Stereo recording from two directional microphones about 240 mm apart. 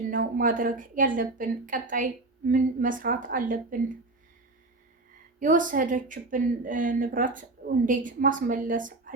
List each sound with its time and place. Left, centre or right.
0.1 s speech: right
5.4 s speech: right